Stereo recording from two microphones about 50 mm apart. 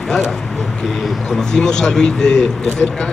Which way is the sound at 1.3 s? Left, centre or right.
Centre.